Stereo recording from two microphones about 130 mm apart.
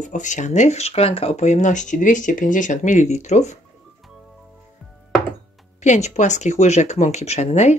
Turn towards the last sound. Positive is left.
turn(degrees=60)  # may be behind; listen again after turning